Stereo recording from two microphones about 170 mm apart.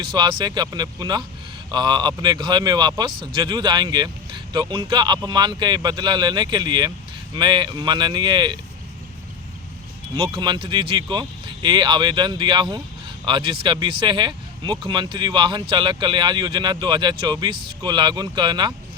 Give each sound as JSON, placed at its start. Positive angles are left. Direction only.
{"t": 0.0, "sound": "speech", "side_deg": -25}
{"t": 10.2, "sound": "speech", "side_deg": -25}